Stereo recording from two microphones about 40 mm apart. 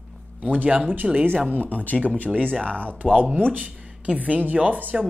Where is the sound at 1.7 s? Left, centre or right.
Left.